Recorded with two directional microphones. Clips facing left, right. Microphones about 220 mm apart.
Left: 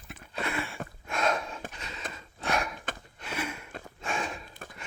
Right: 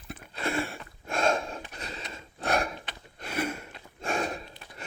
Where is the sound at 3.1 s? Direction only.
45° right (ahead or behind).